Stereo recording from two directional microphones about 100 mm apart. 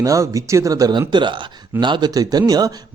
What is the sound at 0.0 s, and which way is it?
Speech, 35° right (ahead or behind).